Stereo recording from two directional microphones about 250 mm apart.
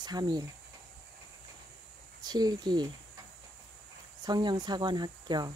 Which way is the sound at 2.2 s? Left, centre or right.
Centre.